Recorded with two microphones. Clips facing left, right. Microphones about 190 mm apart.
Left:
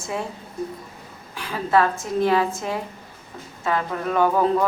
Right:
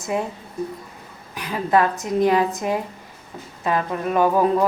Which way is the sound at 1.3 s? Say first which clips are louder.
Right 1 dB; 20° right (ahead or behind).